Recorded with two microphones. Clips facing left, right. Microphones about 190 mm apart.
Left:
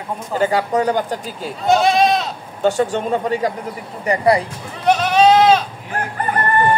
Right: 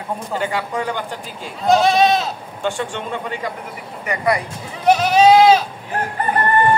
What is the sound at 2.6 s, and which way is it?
Speech, 40° left (ahead or behind).